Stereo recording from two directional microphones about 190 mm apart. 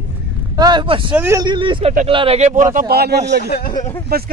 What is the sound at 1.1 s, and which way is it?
Speech, 10° right (ahead or behind).